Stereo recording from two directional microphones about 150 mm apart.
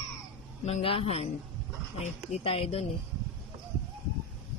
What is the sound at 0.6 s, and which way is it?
A man's voice, 40° left (ahead or behind).